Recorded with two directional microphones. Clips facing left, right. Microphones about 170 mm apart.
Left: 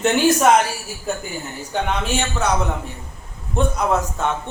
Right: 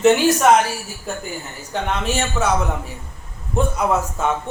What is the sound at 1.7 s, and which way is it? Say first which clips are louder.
A man's voice: even; centre (ahead or behind).